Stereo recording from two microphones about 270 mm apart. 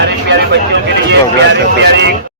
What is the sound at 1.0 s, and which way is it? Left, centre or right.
Speech, right.